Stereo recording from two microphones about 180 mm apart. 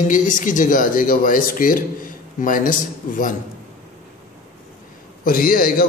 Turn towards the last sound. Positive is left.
turn(degrees=55)  # may be behind; listen again after turning